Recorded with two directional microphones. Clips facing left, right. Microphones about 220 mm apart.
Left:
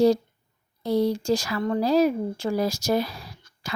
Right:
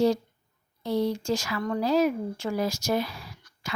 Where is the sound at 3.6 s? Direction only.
35° left (ahead or behind).